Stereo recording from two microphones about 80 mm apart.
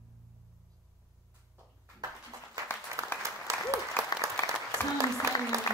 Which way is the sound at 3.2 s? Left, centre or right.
Right.